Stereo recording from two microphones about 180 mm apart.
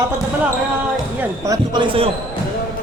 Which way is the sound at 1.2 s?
15° right (ahead or behind).